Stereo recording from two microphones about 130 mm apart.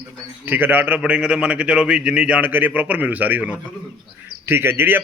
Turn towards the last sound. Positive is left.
turn(degrees=-15)  # may be behind; listen again after turning